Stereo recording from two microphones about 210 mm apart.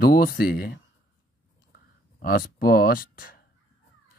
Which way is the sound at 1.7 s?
45° left (ahead or behind).